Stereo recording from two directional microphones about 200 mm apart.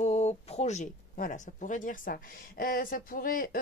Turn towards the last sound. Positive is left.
turn(degrees=45)  # may be behind; listen again after turning